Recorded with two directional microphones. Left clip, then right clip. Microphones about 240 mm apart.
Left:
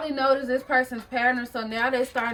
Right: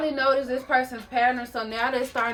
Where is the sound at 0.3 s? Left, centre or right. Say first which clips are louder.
Left 2 dB; centre.